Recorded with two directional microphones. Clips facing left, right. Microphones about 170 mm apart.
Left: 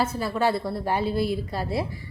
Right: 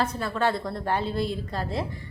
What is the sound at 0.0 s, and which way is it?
A woman's voice, 5° left (ahead or behind).